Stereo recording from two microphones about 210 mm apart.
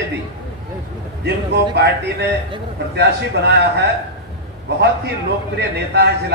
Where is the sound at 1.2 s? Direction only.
50° right (ahead or behind).